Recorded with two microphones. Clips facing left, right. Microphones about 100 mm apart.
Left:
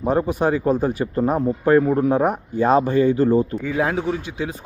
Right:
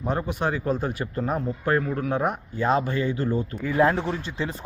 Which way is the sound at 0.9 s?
30° left (ahead or behind).